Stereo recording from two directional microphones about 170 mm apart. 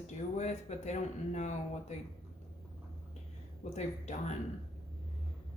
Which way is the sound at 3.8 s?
40° left (ahead or behind).